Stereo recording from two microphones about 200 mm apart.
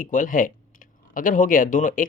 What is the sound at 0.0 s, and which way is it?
Speech, 40° left (ahead or behind).